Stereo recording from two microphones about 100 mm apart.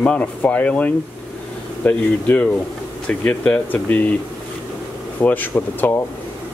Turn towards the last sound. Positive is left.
turn(degrees=20)  # may be behind; listen again after turning